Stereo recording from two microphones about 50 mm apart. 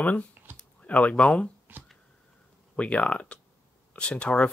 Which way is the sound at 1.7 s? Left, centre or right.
Right.